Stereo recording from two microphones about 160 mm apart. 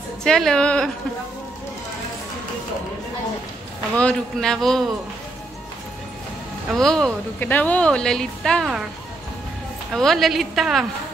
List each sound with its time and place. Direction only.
0.2 s a woman's voice: 5° left (ahead or behind)
3.9 s a woman's voice: 5° left (ahead or behind)
6.7 s a woman's voice: 5° left (ahead or behind)
9.9 s a woman's voice: centre (ahead or behind)